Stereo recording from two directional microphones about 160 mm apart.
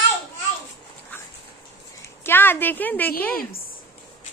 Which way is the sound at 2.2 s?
15° left (ahead or behind).